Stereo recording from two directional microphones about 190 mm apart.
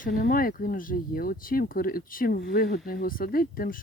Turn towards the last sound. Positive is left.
turn(degrees=50)  # may be behind; listen again after turning